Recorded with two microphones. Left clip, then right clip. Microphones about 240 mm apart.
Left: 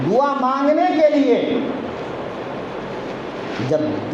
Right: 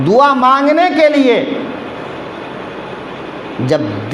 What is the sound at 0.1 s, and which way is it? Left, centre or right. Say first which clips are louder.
A man's voice: right 9 dB; right.